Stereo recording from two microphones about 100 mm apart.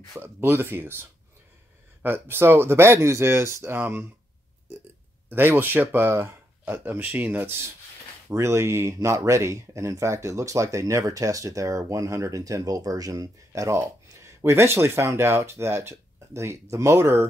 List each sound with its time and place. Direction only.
0.2 s speech: 20° right (ahead or behind)
2.0 s speech: 25° right (ahead or behind)
5.3 s speech: 20° right (ahead or behind)